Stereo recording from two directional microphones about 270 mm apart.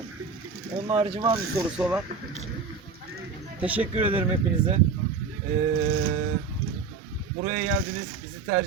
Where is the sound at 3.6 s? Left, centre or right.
Centre.